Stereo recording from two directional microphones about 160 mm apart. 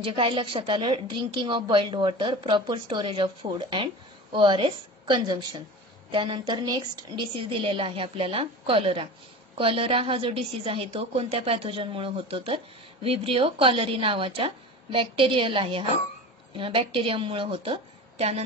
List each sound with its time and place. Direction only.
0.0 s a woman's voice: 30° right (ahead or behind)